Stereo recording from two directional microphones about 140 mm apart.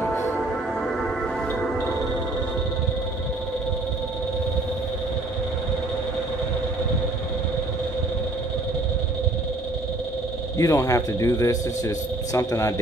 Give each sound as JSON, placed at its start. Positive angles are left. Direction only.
{"t": 0.1, "sound": "music", "side_deg": 20}
{"t": 10.6, "sound": "speech", "side_deg": 20}